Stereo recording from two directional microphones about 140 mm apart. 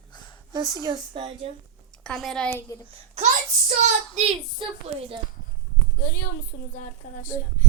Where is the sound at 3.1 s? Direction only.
55° right (ahead or behind).